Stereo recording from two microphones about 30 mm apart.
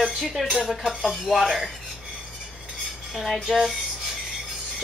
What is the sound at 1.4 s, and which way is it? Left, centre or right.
Speech, centre.